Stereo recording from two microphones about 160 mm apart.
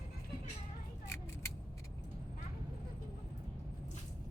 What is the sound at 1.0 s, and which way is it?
Vehicle, 15° left (ahead or behind).